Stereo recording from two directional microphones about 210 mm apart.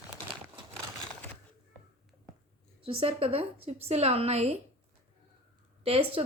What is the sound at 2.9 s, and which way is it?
A woman's voice, 25° right (ahead or behind).